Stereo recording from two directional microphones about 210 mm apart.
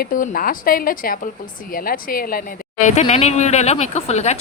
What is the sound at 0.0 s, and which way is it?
A woman's voice, 40° left (ahead or behind).